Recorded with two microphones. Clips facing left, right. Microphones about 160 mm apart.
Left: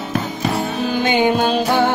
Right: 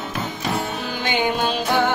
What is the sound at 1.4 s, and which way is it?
Music, 35° left (ahead or behind).